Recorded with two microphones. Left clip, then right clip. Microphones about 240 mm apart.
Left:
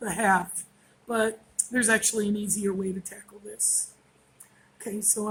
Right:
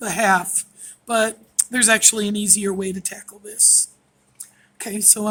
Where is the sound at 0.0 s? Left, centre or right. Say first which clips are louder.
Right 6 dB; right.